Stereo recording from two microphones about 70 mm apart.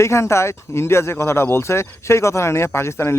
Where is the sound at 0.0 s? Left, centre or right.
Left.